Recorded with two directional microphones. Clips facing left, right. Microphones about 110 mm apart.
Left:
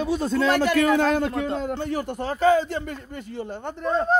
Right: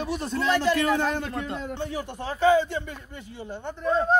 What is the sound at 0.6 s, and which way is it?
A man's voice, 90° left.